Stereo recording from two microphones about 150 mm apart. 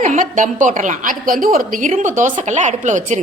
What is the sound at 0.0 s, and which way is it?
A woman's voice, 55° right (ahead or behind).